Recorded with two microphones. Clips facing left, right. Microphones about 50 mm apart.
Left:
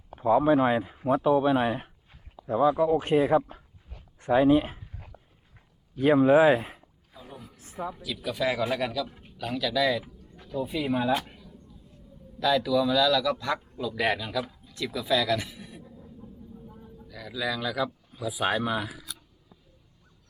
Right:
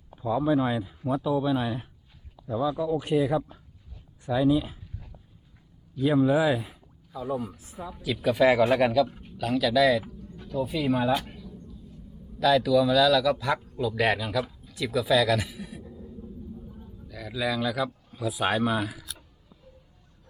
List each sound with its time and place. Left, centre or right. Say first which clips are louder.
0.1 s speech: left 4 dB; left
4.2 s a sound: left 3 dB; left
5.9 s speech: left 3 dB; left
7.3 s speech: right 15 dB; right
7.6 s a sound: left 4 dB; left
8.0 s speech: right 8 dB; centre
9.2 s speech: right 5 dB; centre
10.2 s speech: right 2 dB; centre
12.4 s a man's voice: right 3 dB; centre
17.0 s speech: right 2 dB; centre